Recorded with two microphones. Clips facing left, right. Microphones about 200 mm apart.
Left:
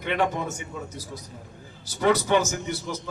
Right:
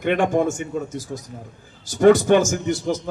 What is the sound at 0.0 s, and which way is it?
A man's voice, 50° right (ahead or behind).